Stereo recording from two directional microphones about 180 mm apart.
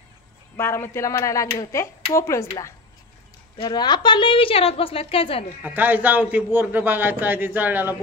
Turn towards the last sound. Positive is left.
turn(degrees=-10)  # may be behind; listen again after turning